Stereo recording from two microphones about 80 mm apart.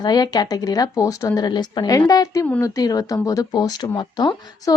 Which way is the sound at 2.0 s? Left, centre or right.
Left.